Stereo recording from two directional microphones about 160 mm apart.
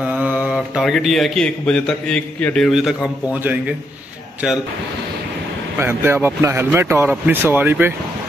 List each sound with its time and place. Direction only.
0.0 s a man's voice: 10° right (ahead or behind)
5.8 s speech: 15° right (ahead or behind)